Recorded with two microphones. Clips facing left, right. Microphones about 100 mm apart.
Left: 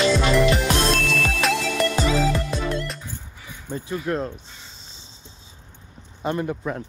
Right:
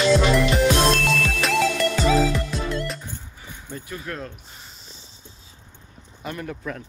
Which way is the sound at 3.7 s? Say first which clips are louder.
Left 8 dB; 25° left (ahead or behind).